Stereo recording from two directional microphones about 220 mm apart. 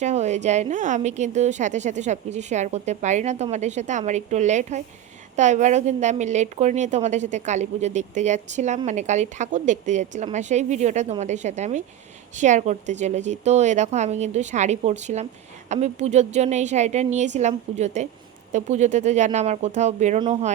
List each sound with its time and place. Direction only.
0.0 s a woman's voice: 30° right (ahead or behind)